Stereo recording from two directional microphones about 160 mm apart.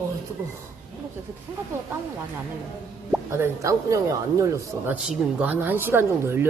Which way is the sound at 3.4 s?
20° right (ahead or behind).